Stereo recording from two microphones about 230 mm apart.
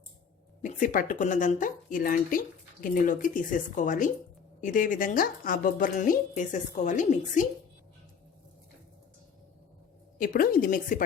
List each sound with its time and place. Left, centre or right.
0.6 s a woman's voice: left
10.2 s a woman's voice: left